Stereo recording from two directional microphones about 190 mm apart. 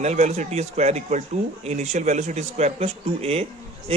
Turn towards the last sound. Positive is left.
turn(degrees=-30)  # may be behind; listen again after turning